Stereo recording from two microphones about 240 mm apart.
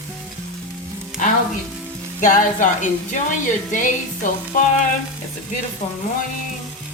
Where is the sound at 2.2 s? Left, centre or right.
Left.